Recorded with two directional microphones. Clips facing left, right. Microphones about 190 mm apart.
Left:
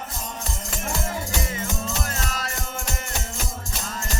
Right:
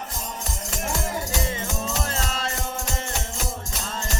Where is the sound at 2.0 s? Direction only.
30° right (ahead or behind).